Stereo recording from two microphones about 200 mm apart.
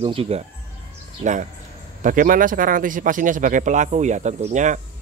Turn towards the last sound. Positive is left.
turn(degrees=-35)  # may be behind; listen again after turning